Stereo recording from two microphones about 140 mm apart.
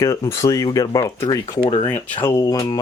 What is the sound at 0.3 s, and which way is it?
Speech, 20° left (ahead or behind).